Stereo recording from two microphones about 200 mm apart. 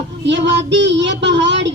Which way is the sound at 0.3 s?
65° right (ahead or behind).